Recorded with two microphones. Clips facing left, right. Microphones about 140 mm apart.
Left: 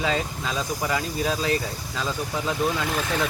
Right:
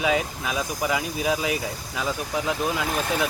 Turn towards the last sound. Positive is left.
turn(degrees=-15)  # may be behind; listen again after turning